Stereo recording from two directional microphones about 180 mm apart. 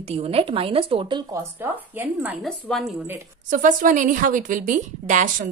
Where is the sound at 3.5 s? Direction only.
45° right (ahead or behind).